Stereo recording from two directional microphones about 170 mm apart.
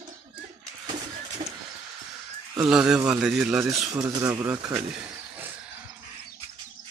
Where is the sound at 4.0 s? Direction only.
15° right (ahead or behind).